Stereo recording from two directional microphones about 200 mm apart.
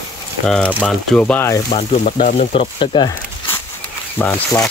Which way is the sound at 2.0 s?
40° left (ahead or behind).